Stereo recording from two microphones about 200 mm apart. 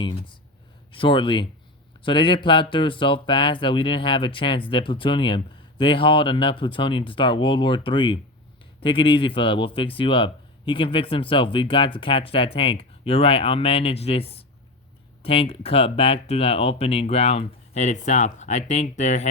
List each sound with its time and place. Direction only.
0.0 s speech: 25° left (ahead or behind)